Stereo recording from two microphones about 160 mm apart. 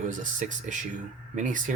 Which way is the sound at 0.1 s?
55° right (ahead or behind).